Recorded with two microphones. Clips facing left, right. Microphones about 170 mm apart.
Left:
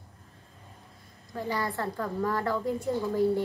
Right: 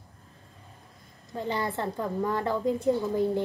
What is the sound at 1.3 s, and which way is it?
A woman's voice, 20° right (ahead or behind).